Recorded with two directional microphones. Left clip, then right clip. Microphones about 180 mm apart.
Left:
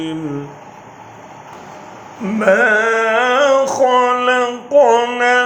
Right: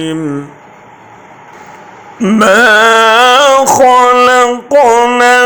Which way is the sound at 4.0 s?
30° right (ahead or behind).